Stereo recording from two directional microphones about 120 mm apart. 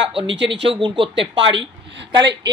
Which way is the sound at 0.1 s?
50° right (ahead or behind).